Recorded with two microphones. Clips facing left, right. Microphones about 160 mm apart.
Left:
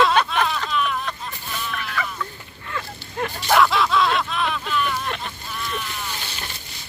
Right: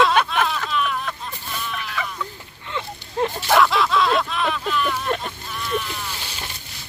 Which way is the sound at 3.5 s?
Centre (ahead or behind).